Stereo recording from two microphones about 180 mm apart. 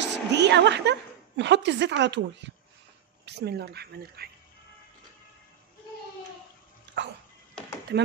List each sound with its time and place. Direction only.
0.0 s a woman's voice: 75° right (ahead or behind)
3.3 s speech: 65° right (ahead or behind)
6.9 s dog: 75° right (ahead or behind)
7.9 s speech: 70° right (ahead or behind)